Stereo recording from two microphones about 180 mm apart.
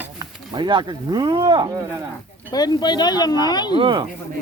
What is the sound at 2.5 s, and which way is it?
Speech, 20° left (ahead or behind).